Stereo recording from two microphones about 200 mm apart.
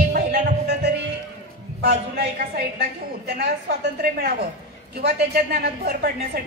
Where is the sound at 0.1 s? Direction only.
50° right (ahead or behind).